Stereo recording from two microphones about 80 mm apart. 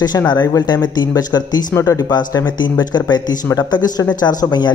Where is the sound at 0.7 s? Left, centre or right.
Left.